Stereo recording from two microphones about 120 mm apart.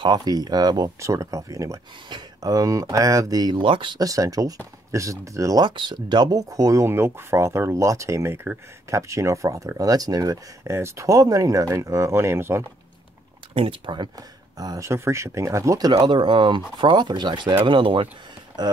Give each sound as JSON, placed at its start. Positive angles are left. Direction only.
{"t": 0.0, "sound": "speech", "side_deg": -35}
{"t": 4.0, "sound": "speech", "side_deg": -30}
{"t": 13.6, "sound": "speech", "side_deg": -45}
{"t": 14.6, "sound": "speech", "side_deg": -30}
{"t": 16.0, "sound": "speech", "side_deg": -40}